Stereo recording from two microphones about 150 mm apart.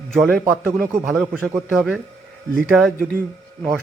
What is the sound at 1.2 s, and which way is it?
Speech, 15° right (ahead or behind).